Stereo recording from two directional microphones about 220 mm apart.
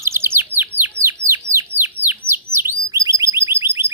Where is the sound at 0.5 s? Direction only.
10° right (ahead or behind).